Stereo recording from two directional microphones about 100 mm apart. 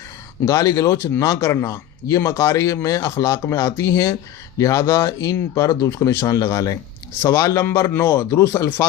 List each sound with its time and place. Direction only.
0.4 s speech: 35° left (ahead or behind)